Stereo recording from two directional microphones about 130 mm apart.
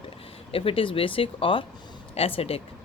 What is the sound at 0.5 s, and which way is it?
Speech, 45° left (ahead or behind).